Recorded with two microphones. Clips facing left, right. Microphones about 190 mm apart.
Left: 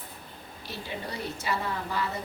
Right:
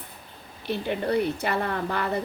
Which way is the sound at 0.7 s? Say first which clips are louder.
Right 12 dB; 60° right (ahead or behind).